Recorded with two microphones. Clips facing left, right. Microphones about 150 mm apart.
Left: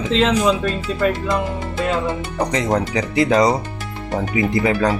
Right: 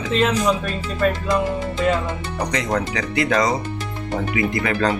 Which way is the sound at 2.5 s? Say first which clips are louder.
Left 3 dB; 25° left (ahead or behind).